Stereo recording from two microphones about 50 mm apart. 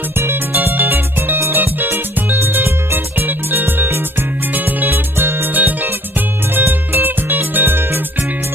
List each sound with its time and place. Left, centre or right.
0.2 s music: right